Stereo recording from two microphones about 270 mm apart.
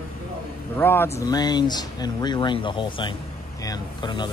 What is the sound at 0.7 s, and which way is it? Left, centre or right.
Speech, centre.